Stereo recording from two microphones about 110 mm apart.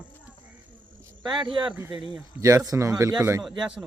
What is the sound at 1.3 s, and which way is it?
Speech, 50° right (ahead or behind).